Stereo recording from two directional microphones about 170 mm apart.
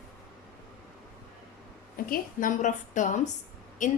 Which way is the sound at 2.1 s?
50° left (ahead or behind).